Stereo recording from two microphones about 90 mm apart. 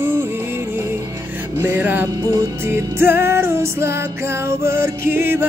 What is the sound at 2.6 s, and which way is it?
Music, 25° right (ahead or behind).